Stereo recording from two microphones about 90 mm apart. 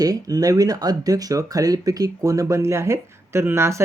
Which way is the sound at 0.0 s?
45° right (ahead or behind).